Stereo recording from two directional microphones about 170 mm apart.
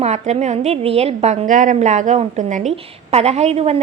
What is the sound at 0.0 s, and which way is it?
A woman's voice, 40° right (ahead or behind).